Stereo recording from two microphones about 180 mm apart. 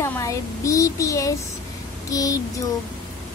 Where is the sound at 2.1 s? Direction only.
20° left (ahead or behind).